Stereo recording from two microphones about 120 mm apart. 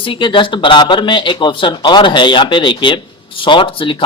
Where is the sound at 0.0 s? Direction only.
45° left (ahead or behind).